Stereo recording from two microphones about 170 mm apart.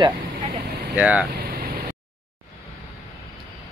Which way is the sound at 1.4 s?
60° right (ahead or behind).